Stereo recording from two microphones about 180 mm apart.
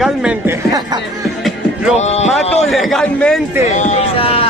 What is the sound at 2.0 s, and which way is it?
Speech, 35° left (ahead or behind).